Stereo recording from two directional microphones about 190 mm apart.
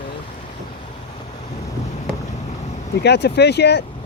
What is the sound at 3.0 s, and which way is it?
Speech, 60° left (ahead or behind).